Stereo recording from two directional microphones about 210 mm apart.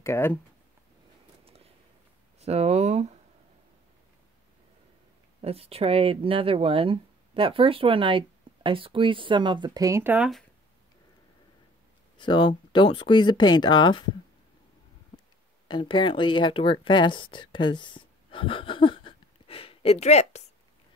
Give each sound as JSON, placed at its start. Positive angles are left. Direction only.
{"t": 0.0, "sound": "speech", "side_deg": 10}
{"t": 1.4, "sound": "a sound", "side_deg": -30}
{"t": 2.4, "sound": "speech", "side_deg": -30}
{"t": 5.4, "sound": "speech", "side_deg": -30}
{"t": 12.2, "sound": "speech", "side_deg": 20}
{"t": 15.7, "sound": "speech", "side_deg": 25}